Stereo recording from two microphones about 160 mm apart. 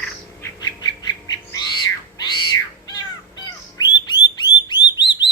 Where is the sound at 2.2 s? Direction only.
25° left (ahead or behind).